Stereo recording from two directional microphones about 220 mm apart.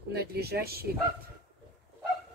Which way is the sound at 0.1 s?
45° right (ahead or behind).